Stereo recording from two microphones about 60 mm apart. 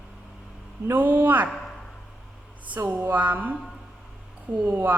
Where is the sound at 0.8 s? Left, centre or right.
Right.